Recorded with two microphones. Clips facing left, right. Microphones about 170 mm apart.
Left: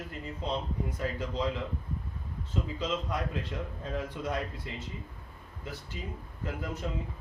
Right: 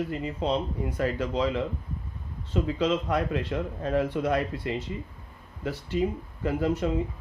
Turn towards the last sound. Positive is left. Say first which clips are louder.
# right 10 dB
turn(degrees=-70)  # may be behind; listen again after turning